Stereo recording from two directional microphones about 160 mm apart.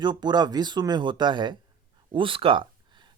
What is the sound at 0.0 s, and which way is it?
Speech, 30° right (ahead or behind).